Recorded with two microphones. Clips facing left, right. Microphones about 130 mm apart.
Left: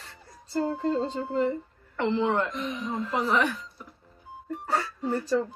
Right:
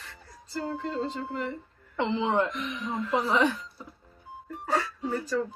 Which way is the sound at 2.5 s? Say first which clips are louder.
Left 2 dB; 30° left (ahead or behind).